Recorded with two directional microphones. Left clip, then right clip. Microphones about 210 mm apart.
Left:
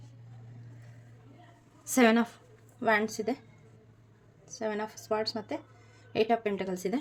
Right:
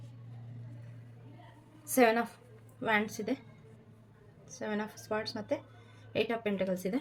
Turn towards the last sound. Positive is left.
turn(degrees=35)  # may be behind; listen again after turning